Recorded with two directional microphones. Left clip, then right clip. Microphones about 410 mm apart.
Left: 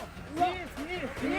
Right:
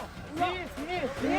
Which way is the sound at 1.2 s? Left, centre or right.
Right.